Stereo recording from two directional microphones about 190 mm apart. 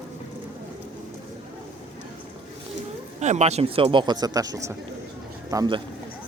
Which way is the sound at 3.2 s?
35° right (ahead or behind).